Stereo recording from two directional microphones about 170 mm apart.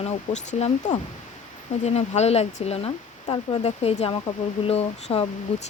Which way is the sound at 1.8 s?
40° left (ahead or behind).